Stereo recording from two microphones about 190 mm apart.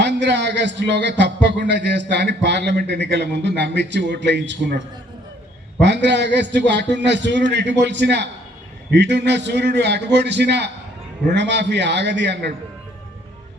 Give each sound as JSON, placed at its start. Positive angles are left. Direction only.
{"t": 0.0, "sound": "a man's voice", "side_deg": -65}
{"t": 5.8, "sound": "a man's voice", "side_deg": -65}